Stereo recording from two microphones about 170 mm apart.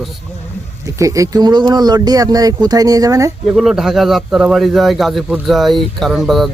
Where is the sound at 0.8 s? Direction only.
20° right (ahead or behind).